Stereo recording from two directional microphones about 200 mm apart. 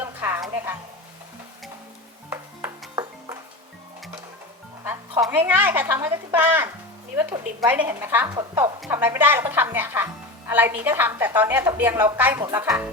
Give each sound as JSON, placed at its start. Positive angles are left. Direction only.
{"t": 0.0, "sound": "music", "side_deg": -10}
{"t": 2.3, "sound": "music", "side_deg": -10}
{"t": 5.2, "sound": "speech", "side_deg": -10}